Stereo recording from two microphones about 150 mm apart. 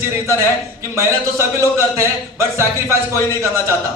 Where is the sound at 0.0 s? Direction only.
15° right (ahead or behind).